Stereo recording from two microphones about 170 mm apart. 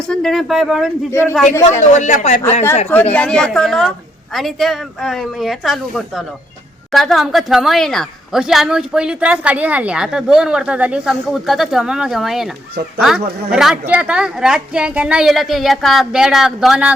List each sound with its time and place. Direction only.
0.1 s a woman's voice: centre (ahead or behind)
1.1 s a man's voice: 15° left (ahead or behind)
1.9 s speech: 45° left (ahead or behind)
2.9 s a woman's voice: 10° left (ahead or behind)
13.5 s a woman's voice: 5° right (ahead or behind)